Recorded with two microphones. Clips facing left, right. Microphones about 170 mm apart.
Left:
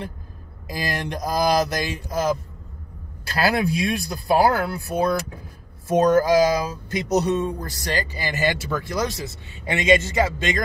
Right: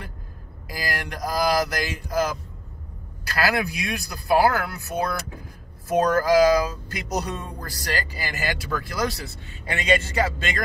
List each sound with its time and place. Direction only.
0.7 s speech: 25° left (ahead or behind)
3.3 s speech: 25° left (ahead or behind)